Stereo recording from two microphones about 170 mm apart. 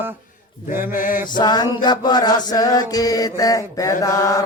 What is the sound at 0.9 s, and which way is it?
Mantra, 50° left (ahead or behind).